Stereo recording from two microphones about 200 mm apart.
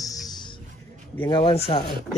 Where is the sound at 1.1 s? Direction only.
10° left (ahead or behind).